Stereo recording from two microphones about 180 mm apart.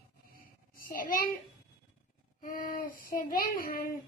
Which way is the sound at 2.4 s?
55° left (ahead or behind).